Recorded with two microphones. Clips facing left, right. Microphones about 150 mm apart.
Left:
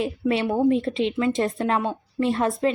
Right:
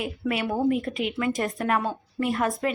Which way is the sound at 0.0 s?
30° left (ahead or behind).